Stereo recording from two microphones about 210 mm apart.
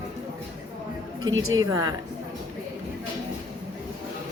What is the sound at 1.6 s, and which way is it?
Speech, 15° right (ahead or behind).